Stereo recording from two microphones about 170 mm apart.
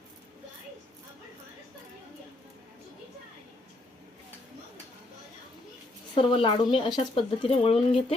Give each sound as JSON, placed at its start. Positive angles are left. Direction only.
{"t": 6.1, "sound": "speech", "side_deg": 30}